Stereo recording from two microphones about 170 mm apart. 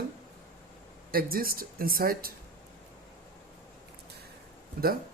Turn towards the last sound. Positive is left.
turn(degrees=-60)  # may be behind; listen again after turning